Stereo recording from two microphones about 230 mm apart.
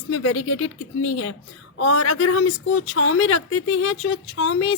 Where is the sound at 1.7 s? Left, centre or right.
Left.